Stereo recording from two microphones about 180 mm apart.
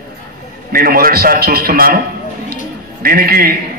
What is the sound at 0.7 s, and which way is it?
A man's voice, 55° right (ahead or behind).